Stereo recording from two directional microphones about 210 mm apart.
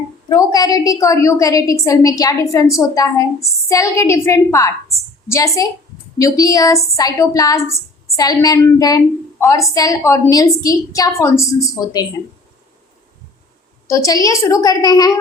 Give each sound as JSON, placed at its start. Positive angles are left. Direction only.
{"t": 0.3, "sound": "a woman's voice", "side_deg": 20}
{"t": 13.8, "sound": "a woman's voice", "side_deg": 15}